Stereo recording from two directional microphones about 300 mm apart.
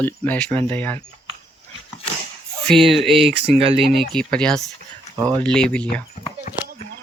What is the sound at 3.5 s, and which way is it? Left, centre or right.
Speech, centre.